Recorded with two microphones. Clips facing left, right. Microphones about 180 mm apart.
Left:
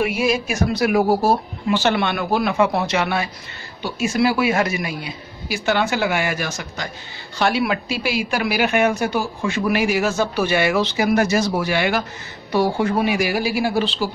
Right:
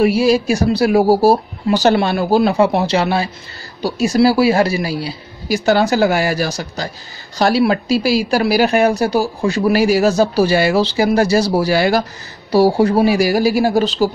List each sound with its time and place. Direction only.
0.0 s speech: 35° right (ahead or behind)